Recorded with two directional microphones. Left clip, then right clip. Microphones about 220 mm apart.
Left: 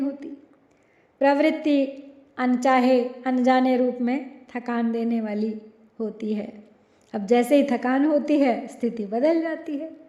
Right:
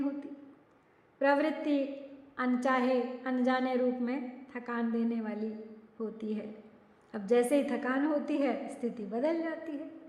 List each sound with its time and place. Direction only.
1.2 s a woman's voice: 30° left (ahead or behind)